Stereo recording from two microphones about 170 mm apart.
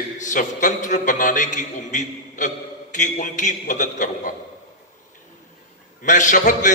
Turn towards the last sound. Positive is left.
turn(degrees=45)  # may be behind; listen again after turning